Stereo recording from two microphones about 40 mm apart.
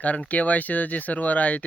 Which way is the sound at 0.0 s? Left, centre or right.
Left.